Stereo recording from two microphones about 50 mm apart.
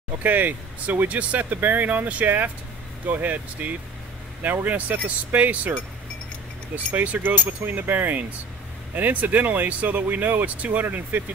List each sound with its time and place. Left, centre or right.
0.2 s speech: right